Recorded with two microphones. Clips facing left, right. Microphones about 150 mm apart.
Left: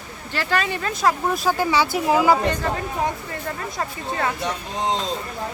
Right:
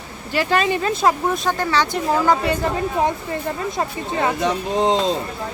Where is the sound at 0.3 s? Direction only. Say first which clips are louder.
Right 5 dB; 20° right (ahead or behind).